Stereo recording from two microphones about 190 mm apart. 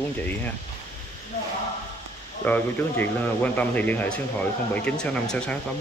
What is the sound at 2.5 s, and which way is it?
Speech, 10° left (ahead or behind).